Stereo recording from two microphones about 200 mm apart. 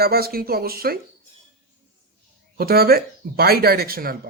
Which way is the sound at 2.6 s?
50° right (ahead or behind).